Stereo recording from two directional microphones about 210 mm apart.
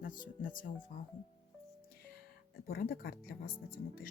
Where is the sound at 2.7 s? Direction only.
45° left (ahead or behind).